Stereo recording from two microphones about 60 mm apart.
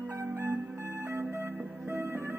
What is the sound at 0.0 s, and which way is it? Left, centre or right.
Music, right.